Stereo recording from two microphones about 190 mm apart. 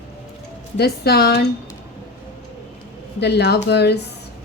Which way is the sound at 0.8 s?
60° left (ahead or behind).